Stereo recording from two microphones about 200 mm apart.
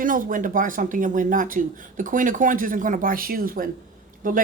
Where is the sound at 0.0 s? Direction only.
40° right (ahead or behind).